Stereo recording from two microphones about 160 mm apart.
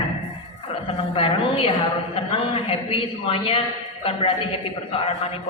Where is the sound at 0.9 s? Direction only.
35° left (ahead or behind).